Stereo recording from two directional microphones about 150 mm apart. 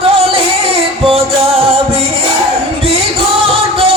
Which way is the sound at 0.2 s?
40° right (ahead or behind).